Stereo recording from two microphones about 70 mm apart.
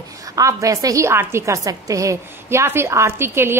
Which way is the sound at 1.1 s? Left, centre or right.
Right.